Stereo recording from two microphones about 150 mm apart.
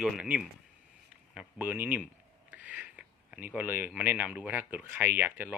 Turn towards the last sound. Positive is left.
turn(degrees=-10)  # may be behind; listen again after turning